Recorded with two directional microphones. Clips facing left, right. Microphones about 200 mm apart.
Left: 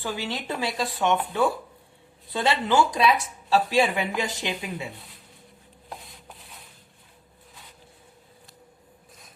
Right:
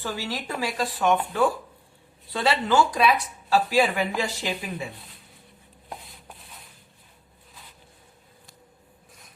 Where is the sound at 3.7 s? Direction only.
25° left (ahead or behind).